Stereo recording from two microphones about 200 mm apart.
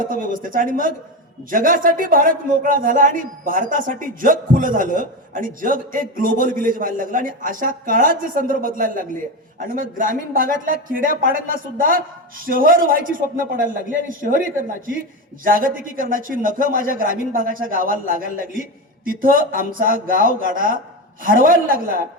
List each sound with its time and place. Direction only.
0.0 s a man's voice: 45° right (ahead or behind)